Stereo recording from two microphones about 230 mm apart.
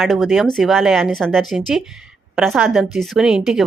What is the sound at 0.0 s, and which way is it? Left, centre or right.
Speech, centre.